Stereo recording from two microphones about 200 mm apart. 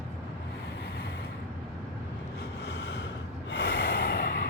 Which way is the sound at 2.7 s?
55° left (ahead or behind).